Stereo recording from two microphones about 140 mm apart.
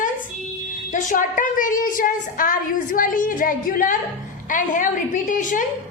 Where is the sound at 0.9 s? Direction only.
65° left (ahead or behind); by 3.9 s 80° left.